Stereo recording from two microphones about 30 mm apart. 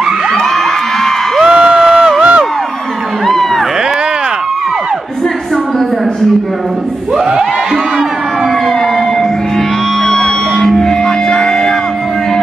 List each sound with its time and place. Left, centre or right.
1.4 s crowd: right
1.9 s crowd: centre
3.3 s a sound: centre
10.0 s music: centre